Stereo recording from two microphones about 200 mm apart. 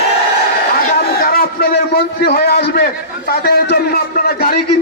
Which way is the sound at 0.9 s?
50° left (ahead or behind).